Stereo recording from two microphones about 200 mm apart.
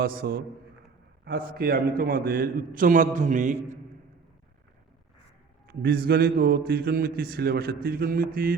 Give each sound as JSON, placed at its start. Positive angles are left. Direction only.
{"t": 0.0, "sound": "a man's voice", "side_deg": -50}
{"t": 5.6, "sound": "a man's voice", "side_deg": -50}